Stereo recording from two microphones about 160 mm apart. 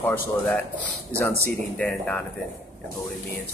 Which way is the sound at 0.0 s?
10° left (ahead or behind).